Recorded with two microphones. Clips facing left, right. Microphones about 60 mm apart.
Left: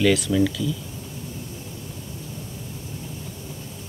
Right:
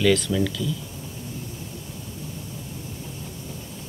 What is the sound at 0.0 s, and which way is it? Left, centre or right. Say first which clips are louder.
Speech: left 1 dB; centre.